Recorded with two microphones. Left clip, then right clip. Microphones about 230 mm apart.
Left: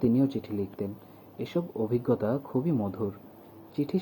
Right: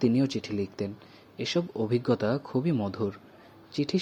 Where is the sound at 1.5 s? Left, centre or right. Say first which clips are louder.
Right 1 dB; right.